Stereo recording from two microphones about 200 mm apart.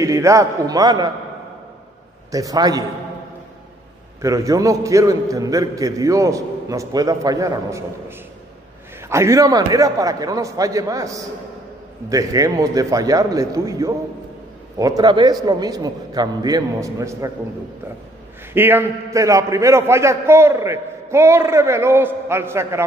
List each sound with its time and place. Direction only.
0.0 s a man's voice: 15° right (ahead or behind)
2.3 s a man's voice: 20° right (ahead or behind)
4.2 s a man's voice: 15° right (ahead or behind)
9.1 s a man's voice: 15° right (ahead or behind)
18.5 s a man's voice: 10° right (ahead or behind)